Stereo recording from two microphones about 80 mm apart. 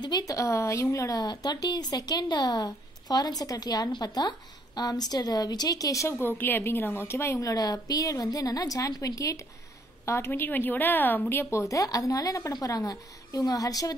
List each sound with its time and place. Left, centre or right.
0.2 s a woman's voice: left
6.1 s a woman's voice: left
7.4 s speech: left
10.0 s speech: left